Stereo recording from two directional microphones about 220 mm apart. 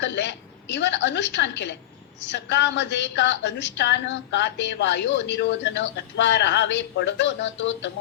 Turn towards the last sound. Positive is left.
turn(degrees=55)  # may be behind; listen again after turning